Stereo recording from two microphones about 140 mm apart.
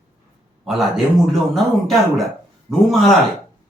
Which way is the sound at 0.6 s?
Centre (ahead or behind).